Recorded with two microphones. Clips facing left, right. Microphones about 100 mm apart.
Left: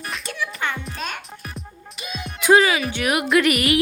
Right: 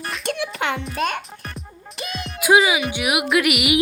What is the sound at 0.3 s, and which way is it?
Speech, 75° right (ahead or behind).